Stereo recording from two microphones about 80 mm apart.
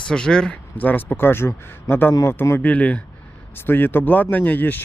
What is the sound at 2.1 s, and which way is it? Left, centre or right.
Speech, left.